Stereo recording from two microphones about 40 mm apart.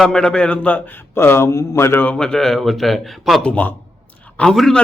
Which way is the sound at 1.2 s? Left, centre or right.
Left.